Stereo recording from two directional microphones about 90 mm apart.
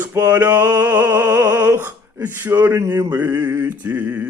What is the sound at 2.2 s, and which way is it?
Mantra, 20° right (ahead or behind).